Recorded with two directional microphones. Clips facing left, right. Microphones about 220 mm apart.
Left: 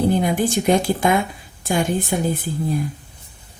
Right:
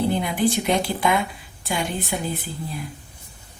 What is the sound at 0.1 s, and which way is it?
A woman's voice, 45° left (ahead or behind).